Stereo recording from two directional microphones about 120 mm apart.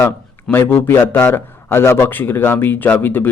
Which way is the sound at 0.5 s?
20° left (ahead or behind).